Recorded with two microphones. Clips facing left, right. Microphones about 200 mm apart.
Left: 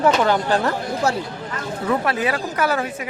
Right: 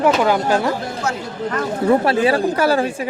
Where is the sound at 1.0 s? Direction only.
35° left (ahead or behind).